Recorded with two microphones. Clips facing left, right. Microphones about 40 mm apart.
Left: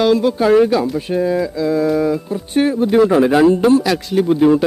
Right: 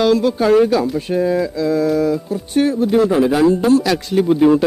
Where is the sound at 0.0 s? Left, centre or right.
Centre; by 3.6 s left.